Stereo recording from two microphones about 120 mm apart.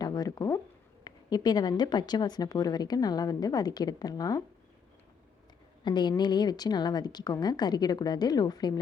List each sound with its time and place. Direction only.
0.0 s speech: 35° left (ahead or behind)
5.8 s speech: 40° left (ahead or behind)